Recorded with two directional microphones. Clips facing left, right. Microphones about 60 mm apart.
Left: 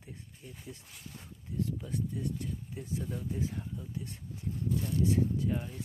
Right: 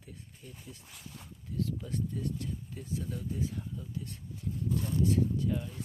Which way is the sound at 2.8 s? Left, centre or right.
Left.